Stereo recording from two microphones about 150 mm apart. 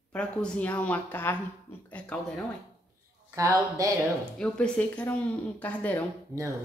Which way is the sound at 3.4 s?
20° right (ahead or behind).